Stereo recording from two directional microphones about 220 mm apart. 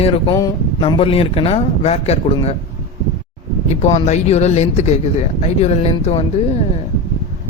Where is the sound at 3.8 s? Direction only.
30° left (ahead or behind).